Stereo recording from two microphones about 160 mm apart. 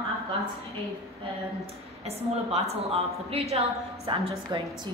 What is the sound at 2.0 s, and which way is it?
A woman's voice, 40° right (ahead or behind).